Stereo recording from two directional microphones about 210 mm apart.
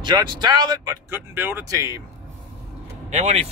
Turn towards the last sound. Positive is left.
turn(degrees=-30)  # may be behind; listen again after turning